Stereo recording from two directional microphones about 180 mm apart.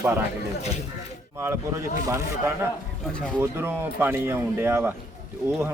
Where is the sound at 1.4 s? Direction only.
15° right (ahead or behind).